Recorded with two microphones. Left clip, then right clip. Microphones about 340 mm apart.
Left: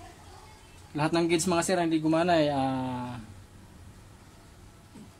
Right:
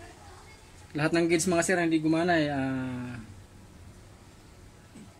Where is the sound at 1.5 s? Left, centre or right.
Left.